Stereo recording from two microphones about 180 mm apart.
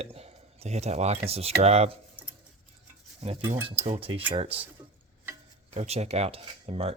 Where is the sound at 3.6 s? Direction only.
30° right (ahead or behind).